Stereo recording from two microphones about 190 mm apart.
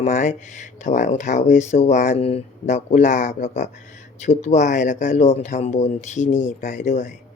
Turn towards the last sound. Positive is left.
turn(degrees=40)  # may be behind; listen again after turning